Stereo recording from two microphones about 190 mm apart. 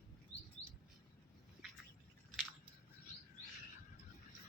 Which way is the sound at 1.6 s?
Centre (ahead or behind).